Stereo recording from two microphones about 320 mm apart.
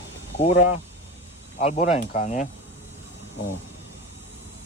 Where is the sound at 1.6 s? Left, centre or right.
Centre.